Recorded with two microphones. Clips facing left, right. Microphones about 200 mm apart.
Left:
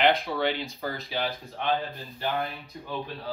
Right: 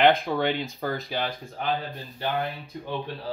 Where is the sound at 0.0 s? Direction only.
50° right (ahead or behind).